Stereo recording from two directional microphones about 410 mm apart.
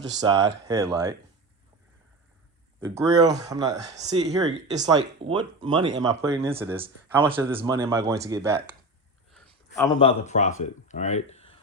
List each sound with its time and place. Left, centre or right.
0.2 s speech: centre
2.8 s speech: centre
9.3 s a sound: centre
10.0 s speech: centre